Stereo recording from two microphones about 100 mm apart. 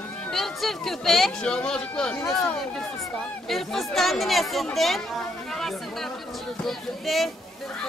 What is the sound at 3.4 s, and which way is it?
Speech, centre (ahead or behind).